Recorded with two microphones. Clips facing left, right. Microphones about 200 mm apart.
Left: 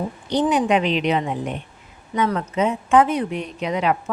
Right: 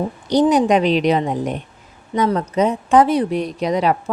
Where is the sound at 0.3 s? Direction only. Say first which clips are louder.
Right 5 dB; 40° right (ahead or behind).